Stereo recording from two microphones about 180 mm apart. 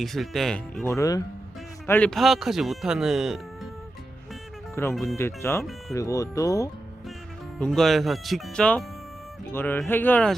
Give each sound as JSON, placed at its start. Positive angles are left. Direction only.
{"t": 0.0, "sound": "speech", "side_deg": 0}
{"t": 0.9, "sound": "speech", "side_deg": 20}
{"t": 1.9, "sound": "speech", "side_deg": 5}
{"t": 4.7, "sound": "speech", "side_deg": 15}
{"t": 7.6, "sound": "speech", "side_deg": 0}